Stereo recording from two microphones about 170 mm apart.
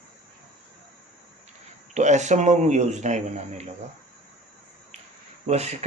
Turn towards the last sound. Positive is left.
turn(degrees=-40)  # may be behind; listen again after turning